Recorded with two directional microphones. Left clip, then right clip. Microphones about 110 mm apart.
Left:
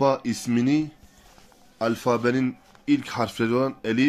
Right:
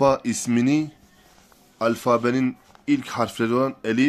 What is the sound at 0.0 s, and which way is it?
Speech, 25° right (ahead or behind).